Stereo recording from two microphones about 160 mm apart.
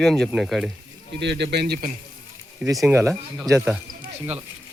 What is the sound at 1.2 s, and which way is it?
Speech, 90° right.